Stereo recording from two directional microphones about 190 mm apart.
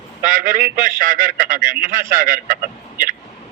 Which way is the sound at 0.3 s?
50° right (ahead or behind).